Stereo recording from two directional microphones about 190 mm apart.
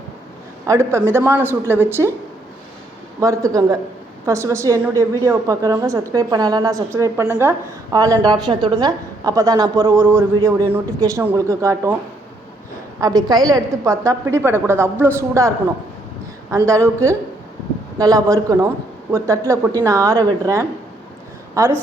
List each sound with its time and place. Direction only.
0.6 s a woman's voice: 15° right (ahead or behind)
3.2 s a woman's voice: 15° right (ahead or behind)
13.0 s a woman's voice: 20° right (ahead or behind)